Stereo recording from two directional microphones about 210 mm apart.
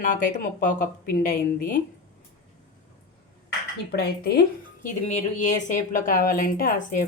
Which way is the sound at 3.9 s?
50° left (ahead or behind).